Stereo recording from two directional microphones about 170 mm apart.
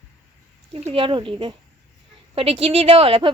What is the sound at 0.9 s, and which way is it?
Speech, 30° right (ahead or behind).